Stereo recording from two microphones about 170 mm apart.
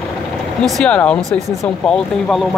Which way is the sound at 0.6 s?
5° left (ahead or behind).